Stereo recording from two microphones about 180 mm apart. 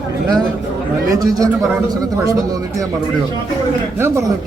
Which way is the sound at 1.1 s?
20° right (ahead or behind).